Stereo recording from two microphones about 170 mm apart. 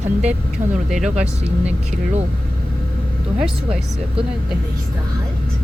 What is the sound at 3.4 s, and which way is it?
Speech, 5° right (ahead or behind).